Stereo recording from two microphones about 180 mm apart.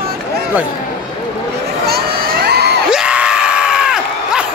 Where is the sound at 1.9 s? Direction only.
60° right (ahead or behind).